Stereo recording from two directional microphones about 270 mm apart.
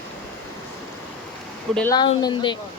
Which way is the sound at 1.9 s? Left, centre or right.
Centre.